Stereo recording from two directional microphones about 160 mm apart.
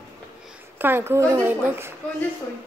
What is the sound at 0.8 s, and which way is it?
A woman's voice, 15° right (ahead or behind).